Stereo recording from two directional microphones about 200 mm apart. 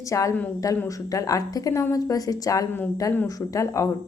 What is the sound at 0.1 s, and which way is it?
A woman's voice, 15° left (ahead or behind).